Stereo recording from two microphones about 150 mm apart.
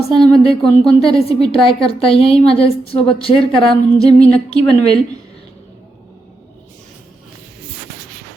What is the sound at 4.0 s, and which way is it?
Music, 5° left (ahead or behind).